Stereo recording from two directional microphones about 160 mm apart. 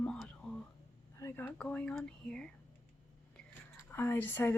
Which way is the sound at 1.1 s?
15° left (ahead or behind).